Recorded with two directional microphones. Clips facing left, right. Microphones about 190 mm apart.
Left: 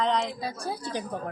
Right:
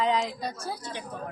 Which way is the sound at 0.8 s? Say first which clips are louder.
Left 5 dB; 35° left (ahead or behind).